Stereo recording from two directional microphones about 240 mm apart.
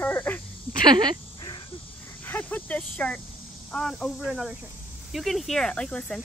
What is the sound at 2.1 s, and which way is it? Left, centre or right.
Snake, centre.